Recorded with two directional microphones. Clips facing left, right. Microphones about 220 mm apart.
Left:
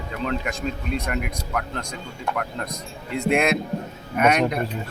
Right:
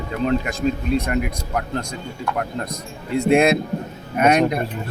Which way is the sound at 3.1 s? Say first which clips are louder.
Right 5 dB; 30° right (ahead or behind).